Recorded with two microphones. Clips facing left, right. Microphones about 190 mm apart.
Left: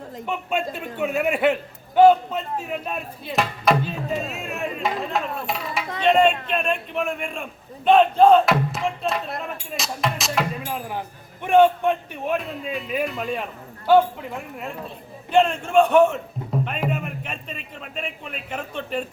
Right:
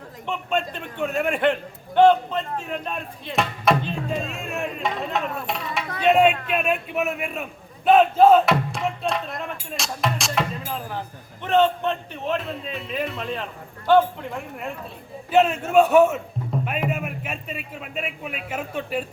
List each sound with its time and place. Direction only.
0.3 s a man's voice: 10° left (ahead or behind)
9.7 s music: centre (ahead or behind)
11.4 s a man's voice: 10° left (ahead or behind); by 19.0 s 5° right (ahead or behind)